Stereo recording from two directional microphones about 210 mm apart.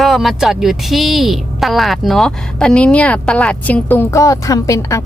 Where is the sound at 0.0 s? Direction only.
Centre (ahead or behind).